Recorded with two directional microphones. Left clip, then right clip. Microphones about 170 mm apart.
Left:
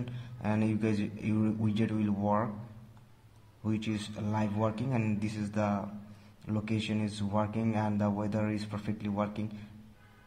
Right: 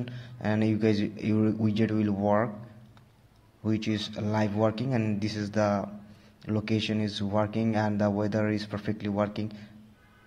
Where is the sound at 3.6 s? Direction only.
20° right (ahead or behind).